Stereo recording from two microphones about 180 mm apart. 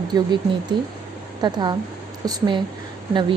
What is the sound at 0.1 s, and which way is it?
A woman's voice, 20° right (ahead or behind).